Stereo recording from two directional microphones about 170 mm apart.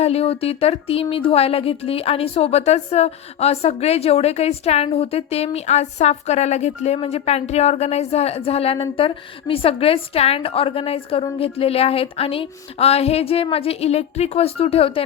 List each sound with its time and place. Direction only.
0.0 s a woman's voice: 35° left (ahead or behind)